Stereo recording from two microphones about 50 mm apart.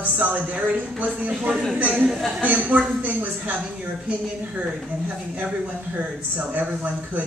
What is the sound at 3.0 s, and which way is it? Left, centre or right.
Speech, right.